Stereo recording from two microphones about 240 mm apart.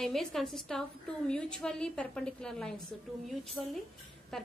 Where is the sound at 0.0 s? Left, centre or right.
Centre.